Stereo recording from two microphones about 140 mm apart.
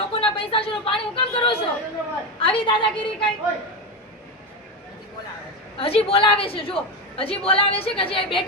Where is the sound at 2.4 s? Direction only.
40° left (ahead or behind).